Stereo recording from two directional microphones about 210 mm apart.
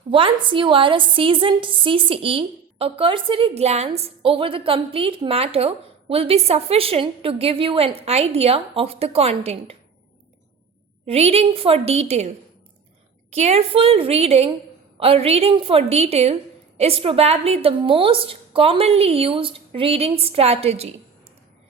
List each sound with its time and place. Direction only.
0.1 s a woman's voice: 25° right (ahead or behind)
11.0 s a woman's voice: 30° right (ahead or behind)
13.3 s a woman's voice: 30° right (ahead or behind)